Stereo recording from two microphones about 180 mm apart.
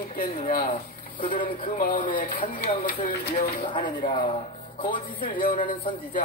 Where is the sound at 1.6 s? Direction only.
50° left (ahead or behind).